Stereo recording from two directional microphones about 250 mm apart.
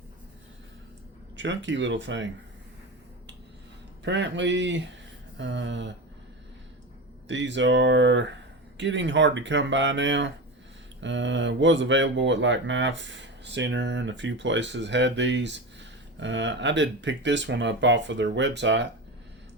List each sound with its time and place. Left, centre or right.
1.4 s speech: right
4.0 s speech: right
7.3 s speech: right